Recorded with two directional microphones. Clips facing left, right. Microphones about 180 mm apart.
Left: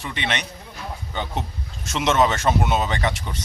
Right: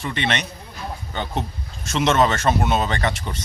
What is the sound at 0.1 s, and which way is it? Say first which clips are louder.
Speech: right 3 dB; 10° left (ahead or behind).